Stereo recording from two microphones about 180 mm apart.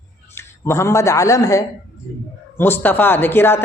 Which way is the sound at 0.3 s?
15° left (ahead or behind).